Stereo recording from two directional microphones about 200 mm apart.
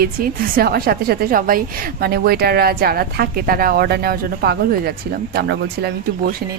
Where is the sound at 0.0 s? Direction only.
45° right (ahead or behind).